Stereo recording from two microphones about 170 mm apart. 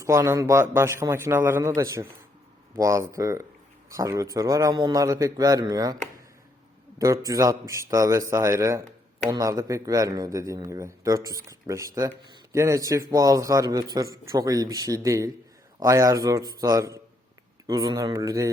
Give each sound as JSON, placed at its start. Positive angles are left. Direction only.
{"t": 0.0, "sound": "a man's voice", "side_deg": -15}
{"t": 7.0, "sound": "a man's voice", "side_deg": -20}